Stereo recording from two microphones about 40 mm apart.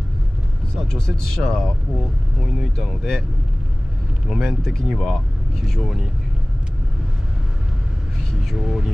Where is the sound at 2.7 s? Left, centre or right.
Centre.